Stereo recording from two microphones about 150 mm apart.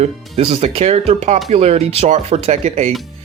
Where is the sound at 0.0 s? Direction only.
40° right (ahead or behind).